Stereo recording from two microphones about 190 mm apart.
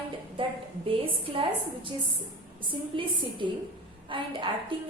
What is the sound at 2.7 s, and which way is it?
A woman's voice, 25° right (ahead or behind).